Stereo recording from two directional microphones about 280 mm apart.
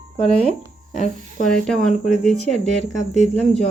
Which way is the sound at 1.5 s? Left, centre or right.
Centre.